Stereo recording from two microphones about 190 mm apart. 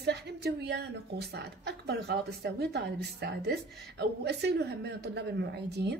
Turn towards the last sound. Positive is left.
turn(degrees=-60)  # may be behind; listen again after turning